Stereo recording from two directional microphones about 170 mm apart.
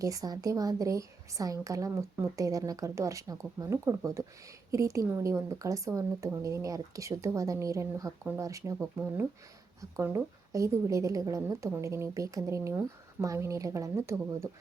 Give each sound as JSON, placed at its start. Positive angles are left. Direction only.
{"t": 0.0, "sound": "a woman's voice", "side_deg": -20}